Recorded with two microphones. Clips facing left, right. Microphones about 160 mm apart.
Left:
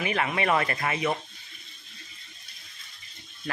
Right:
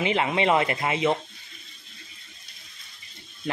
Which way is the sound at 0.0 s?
20° right (ahead or behind).